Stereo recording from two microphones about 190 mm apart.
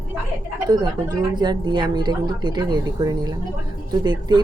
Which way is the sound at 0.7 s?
20° right (ahead or behind).